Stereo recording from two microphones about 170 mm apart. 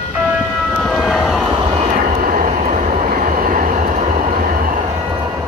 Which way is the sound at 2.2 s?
55° right (ahead or behind).